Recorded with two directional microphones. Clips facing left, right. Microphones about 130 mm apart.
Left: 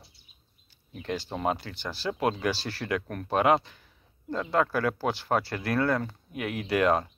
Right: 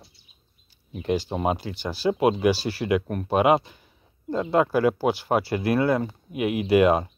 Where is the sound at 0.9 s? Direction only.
15° right (ahead or behind).